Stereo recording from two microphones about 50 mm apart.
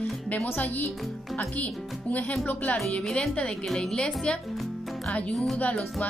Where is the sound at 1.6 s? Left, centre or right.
Left.